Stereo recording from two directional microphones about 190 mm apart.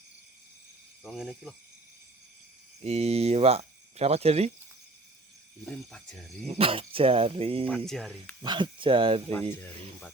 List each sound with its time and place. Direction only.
1.0 s speech: centre (ahead or behind)
2.8 s speech: 35° right (ahead or behind)
5.6 s speech: 5° left (ahead or behind)
6.5 s speech: 30° right (ahead or behind)
7.7 s speech: centre (ahead or behind)
8.4 s speech: 25° right (ahead or behind)
9.3 s speech: 10° left (ahead or behind)